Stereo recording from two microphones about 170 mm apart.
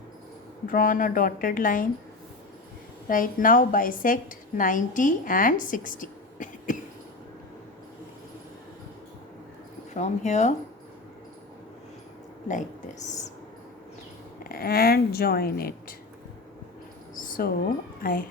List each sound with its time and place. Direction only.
0.7 s a woman's voice: 55° left (ahead or behind)
3.1 s a woman's voice: 55° left (ahead or behind)
9.9 s a woman's voice: 45° left (ahead or behind)
13.1 s whispering: 45° left (ahead or behind)
14.4 s speech: 60° left (ahead or behind)
17.2 s a sound: 55° left (ahead or behind)
18.0 s speech: 55° left (ahead or behind)